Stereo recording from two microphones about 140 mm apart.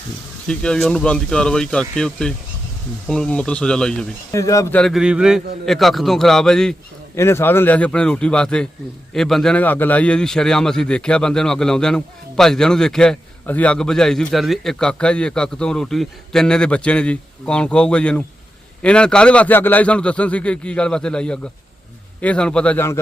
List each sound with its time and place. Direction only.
0.4 s a man's voice: 5° left (ahead or behind)
4.3 s speech: 20° left (ahead or behind)
4.7 s a man's voice: centre (ahead or behind)
7.2 s a man's voice: 20° left (ahead or behind)